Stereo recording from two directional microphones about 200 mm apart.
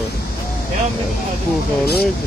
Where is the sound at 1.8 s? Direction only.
50° left (ahead or behind).